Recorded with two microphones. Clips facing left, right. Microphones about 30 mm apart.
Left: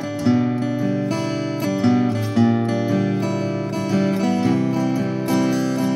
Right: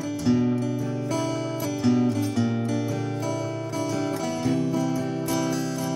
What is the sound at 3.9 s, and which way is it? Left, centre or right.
Music, left.